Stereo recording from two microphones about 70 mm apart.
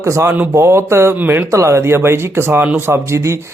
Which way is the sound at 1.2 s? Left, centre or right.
Right.